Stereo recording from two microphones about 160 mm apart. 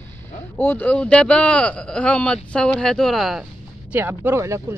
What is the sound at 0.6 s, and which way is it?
Speech, 10° left (ahead or behind).